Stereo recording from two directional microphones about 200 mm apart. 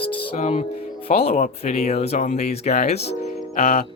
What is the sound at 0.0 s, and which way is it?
Music, 25° left (ahead or behind).